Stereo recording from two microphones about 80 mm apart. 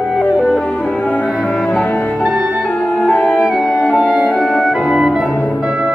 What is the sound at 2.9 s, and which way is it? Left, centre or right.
Music, centre.